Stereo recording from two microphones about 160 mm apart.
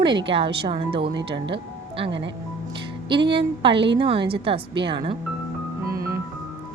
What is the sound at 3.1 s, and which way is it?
Speech, 30° right (ahead or behind).